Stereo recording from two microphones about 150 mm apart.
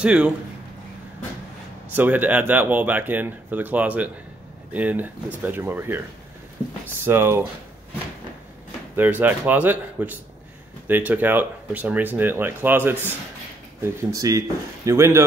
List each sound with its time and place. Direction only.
0.0 s speech: 10° right (ahead or behind)
1.9 s speech: 10° right (ahead or behind)
7.1 s speech: 15° right (ahead or behind)
8.9 s speech: 10° right (ahead or behind)
14.1 s speech: 20° right (ahead or behind)